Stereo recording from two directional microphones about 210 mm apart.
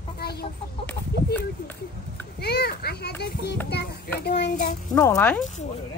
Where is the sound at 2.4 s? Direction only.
50° left (ahead or behind).